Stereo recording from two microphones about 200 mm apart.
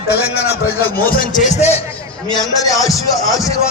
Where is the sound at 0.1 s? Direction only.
50° left (ahead or behind).